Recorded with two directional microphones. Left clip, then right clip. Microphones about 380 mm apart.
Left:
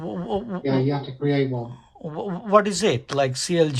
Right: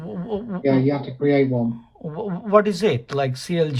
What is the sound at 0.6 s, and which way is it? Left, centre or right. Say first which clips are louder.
Speech: right 7 dB; centre.